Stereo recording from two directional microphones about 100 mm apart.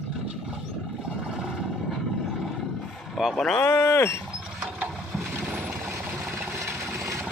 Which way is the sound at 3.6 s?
25° left (ahead or behind).